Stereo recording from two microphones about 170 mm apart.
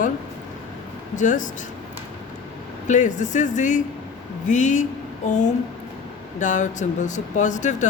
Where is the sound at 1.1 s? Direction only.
50° left (ahead or behind).